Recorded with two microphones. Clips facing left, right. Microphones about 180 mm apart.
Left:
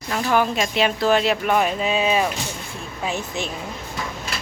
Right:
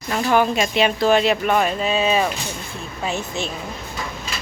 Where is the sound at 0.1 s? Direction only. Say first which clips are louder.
Right 2 dB; 5° right (ahead or behind).